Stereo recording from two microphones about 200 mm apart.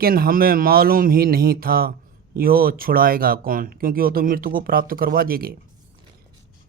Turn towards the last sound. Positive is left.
turn(degrees=-50)  # may be behind; listen again after turning